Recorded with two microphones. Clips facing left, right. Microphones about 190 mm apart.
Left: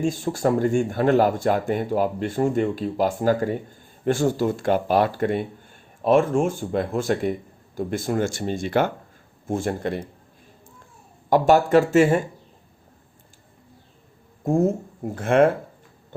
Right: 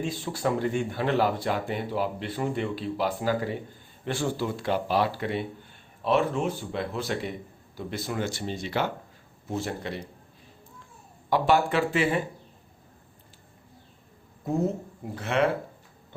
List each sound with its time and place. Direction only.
0.0 s speech: 45° left (ahead or behind)
11.3 s speech: 45° left (ahead or behind)
14.4 s speech: 45° left (ahead or behind)